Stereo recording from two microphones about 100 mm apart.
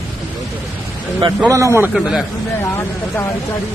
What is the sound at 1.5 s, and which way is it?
Speech, 30° right (ahead or behind).